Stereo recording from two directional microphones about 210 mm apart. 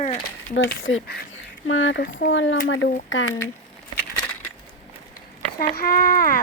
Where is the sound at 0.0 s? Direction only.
30° left (ahead or behind).